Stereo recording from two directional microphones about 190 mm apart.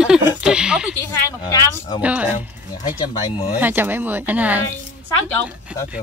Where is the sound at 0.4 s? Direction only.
5° right (ahead or behind).